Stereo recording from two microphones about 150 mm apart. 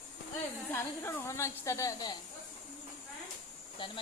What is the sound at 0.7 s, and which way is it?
A woman's voice, 15° left (ahead or behind).